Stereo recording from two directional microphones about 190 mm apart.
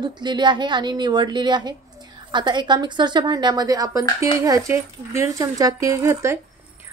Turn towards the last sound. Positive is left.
turn(degrees=-15)  # may be behind; listen again after turning